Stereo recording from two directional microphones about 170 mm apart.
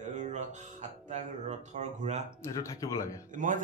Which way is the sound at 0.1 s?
45° right (ahead or behind).